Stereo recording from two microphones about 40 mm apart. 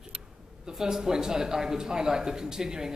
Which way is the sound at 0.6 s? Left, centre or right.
Centre.